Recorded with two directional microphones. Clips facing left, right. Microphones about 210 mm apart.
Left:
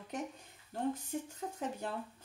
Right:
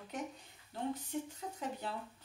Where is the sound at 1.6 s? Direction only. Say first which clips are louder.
Left 2 dB; 45° left (ahead or behind).